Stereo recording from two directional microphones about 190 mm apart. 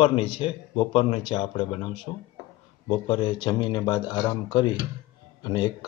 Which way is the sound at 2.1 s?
20° left (ahead or behind).